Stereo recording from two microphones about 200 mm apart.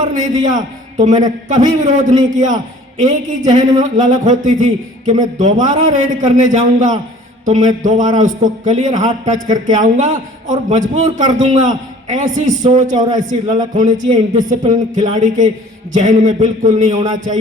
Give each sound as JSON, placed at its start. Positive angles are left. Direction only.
{"t": 0.0, "sound": "a man's voice", "side_deg": -40}
{"t": 3.5, "sound": "speech", "side_deg": -20}
{"t": 3.8, "sound": "a man's voice", "side_deg": -40}
{"t": 7.4, "sound": "a sound", "side_deg": -35}
{"t": 7.9, "sound": "a man's voice", "side_deg": -40}
{"t": 14.6, "sound": "a man's voice", "side_deg": -35}